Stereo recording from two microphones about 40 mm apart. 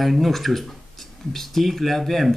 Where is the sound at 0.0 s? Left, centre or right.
Centre.